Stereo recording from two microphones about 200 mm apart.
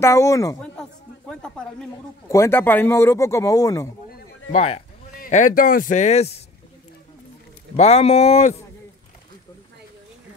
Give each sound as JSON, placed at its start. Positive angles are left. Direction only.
{"t": 0.0, "sound": "speech", "side_deg": 15}
{"t": 1.3, "sound": "a sound", "side_deg": 5}
{"t": 2.2, "sound": "speech", "side_deg": 15}
{"t": 4.5, "sound": "a man's voice", "side_deg": 30}
{"t": 5.1, "sound": "a man's voice", "side_deg": 40}
{"t": 7.7, "sound": "a man's voice", "side_deg": 30}